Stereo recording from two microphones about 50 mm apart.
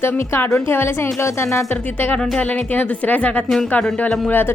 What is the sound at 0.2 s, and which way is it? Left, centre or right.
Speech, left.